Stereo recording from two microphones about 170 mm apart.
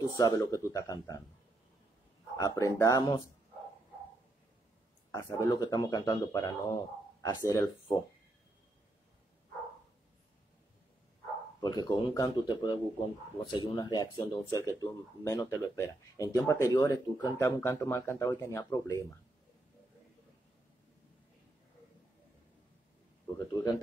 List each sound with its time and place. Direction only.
0.2 s speech: 20° left (ahead or behind)
2.3 s speech: 20° left (ahead or behind)
5.1 s speech: 20° left (ahead or behind)
11.6 s speech: 20° left (ahead or behind)